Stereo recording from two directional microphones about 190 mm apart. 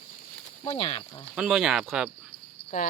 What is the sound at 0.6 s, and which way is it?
Speech, 30° left (ahead or behind).